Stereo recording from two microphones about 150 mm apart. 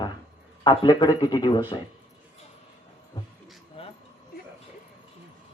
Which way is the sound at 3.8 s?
40° left (ahead or behind).